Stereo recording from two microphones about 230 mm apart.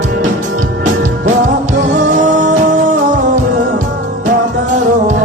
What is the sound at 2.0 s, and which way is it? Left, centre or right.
Music, right.